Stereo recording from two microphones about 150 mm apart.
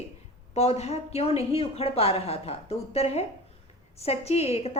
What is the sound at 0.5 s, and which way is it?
A woman's voice, 45° left (ahead or behind).